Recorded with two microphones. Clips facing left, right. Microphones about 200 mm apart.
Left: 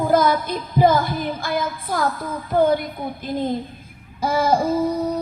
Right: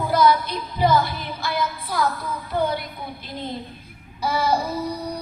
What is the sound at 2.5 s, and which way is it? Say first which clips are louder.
Speech: left 7 dB; 50° left (ahead or behind).